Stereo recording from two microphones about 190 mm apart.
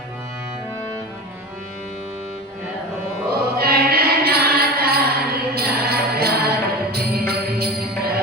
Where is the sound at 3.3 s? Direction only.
55° right (ahead or behind).